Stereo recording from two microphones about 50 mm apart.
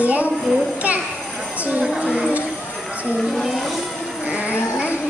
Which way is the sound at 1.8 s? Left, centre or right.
Centre.